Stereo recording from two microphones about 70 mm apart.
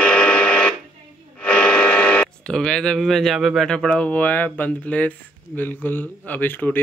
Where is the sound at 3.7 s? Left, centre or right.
Centre.